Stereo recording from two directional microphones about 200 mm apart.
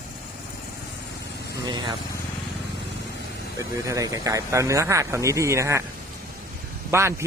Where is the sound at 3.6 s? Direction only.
15° right (ahead or behind).